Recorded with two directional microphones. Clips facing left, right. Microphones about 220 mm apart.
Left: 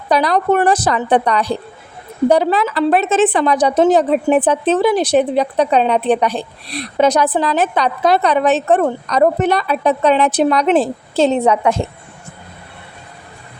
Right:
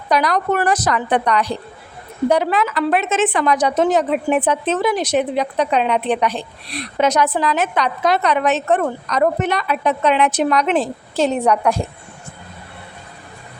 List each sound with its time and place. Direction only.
0.1 s a woman's voice: 30° left (ahead or behind)